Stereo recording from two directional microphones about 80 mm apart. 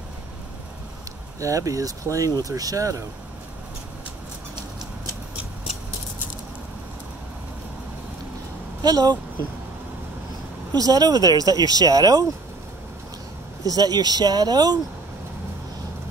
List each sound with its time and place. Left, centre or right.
1.4 s speech: right
8.8 s speech: right
10.7 s speech: right
13.7 s speech: right